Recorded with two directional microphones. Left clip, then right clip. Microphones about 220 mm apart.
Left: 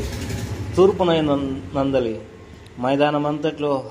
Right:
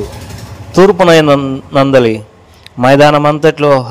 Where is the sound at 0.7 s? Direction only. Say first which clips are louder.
Right 11 dB; 45° right (ahead or behind).